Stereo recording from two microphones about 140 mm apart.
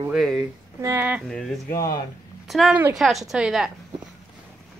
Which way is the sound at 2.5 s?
Centre (ahead or behind).